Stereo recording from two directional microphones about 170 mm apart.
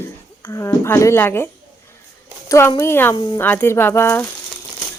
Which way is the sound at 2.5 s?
15° left (ahead or behind).